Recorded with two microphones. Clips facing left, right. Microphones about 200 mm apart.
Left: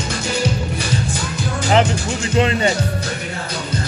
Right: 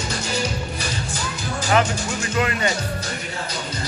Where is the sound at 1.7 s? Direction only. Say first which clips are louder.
Left 4 dB; 25° left (ahead or behind).